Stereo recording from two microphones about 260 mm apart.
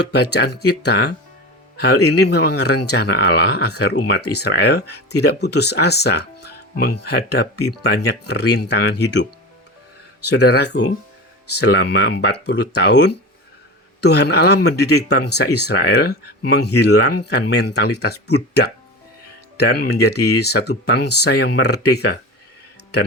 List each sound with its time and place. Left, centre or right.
0.1 s speech: left
10.3 s speech: left